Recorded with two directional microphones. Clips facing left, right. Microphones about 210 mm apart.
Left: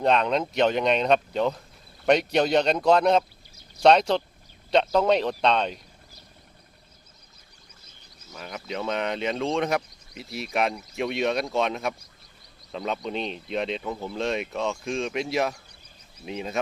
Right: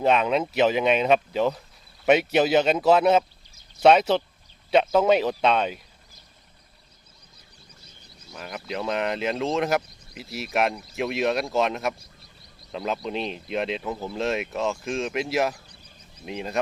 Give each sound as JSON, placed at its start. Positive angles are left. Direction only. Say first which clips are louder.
{"t": 0.0, "sound": "speech", "louder": "right 1 dB", "side_deg": -5}
{"t": 8.4, "sound": "speech", "louder": "right 1 dB", "side_deg": 0}